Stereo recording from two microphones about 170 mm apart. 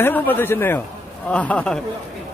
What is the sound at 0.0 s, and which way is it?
A man's voice, 10° left (ahead or behind).